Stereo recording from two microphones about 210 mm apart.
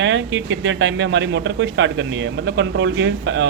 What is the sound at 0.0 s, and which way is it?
A man's voice, 60° right (ahead or behind).